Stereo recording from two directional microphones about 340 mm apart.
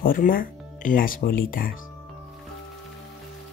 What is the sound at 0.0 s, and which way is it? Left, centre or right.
Speech, left.